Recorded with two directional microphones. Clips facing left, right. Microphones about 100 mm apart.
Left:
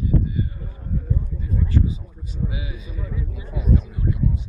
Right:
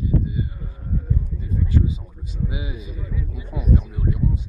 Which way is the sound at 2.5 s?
25° right (ahead or behind).